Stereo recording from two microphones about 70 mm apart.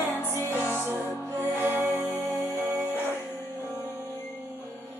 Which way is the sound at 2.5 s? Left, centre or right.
Left.